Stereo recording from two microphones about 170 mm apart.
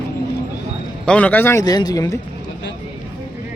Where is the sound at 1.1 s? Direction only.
10° left (ahead or behind).